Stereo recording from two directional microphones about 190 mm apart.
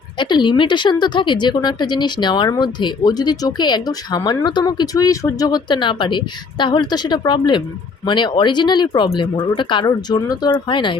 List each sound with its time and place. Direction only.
0.2 s a woman's voice: 25° left (ahead or behind)